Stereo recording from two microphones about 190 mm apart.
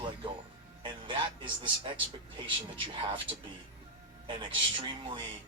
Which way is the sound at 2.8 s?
25° right (ahead or behind).